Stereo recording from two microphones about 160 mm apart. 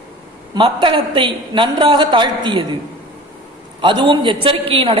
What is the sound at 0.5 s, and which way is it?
A woman's voice, 30° right (ahead or behind).